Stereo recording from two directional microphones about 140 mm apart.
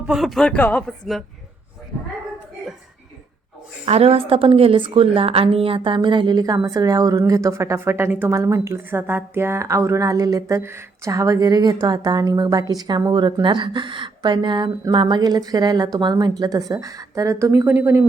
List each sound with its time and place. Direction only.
0.1 s speech: centre (ahead or behind)
3.8 s a woman's voice: 45° right (ahead or behind); by 18.0 s 20° right (ahead or behind)